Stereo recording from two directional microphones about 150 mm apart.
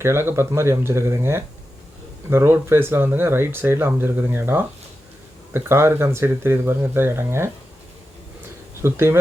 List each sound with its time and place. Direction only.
0.0 s speech: 15° right (ahead or behind)
8.8 s speech: 15° right (ahead or behind)